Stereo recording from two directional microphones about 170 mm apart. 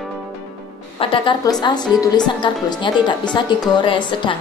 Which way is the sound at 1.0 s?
30° left (ahead or behind).